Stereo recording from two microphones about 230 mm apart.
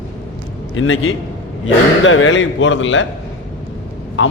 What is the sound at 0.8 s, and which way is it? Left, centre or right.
A man's voice, left.